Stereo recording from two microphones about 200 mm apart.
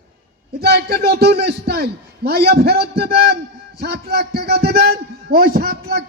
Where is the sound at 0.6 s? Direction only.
50° right (ahead or behind).